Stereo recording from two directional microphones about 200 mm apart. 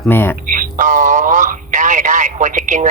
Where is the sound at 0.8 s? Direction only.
40° right (ahead or behind).